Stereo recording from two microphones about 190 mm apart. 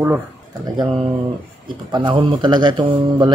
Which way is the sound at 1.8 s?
25° right (ahead or behind).